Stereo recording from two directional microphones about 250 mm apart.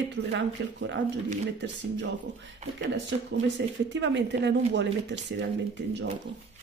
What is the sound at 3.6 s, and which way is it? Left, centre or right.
Speech, right.